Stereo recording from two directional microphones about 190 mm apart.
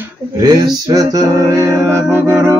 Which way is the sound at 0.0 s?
20° right (ahead or behind).